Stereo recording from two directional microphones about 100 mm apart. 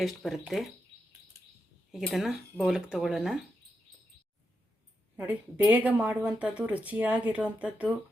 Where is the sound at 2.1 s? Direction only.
5° right (ahead or behind).